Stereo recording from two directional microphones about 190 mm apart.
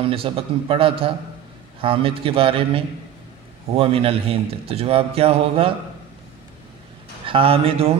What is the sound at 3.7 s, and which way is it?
A man's voice, 30° right (ahead or behind).